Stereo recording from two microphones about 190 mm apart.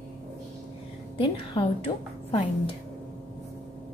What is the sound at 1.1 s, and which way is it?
A woman's voice, 25° left (ahead or behind).